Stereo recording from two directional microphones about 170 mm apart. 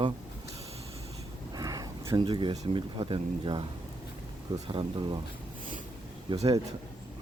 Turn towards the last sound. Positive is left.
turn(degrees=-25)  # may be behind; listen again after turning